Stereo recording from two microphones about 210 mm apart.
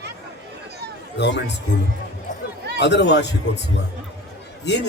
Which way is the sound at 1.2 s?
55° left (ahead or behind).